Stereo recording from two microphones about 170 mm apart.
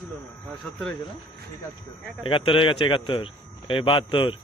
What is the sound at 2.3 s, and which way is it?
A man's voice, 30° left (ahead or behind).